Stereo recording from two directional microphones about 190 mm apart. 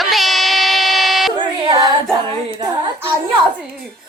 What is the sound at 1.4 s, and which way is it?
Music, 20° right (ahead or behind).